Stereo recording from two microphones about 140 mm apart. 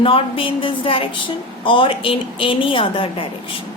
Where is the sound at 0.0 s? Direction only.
40° left (ahead or behind).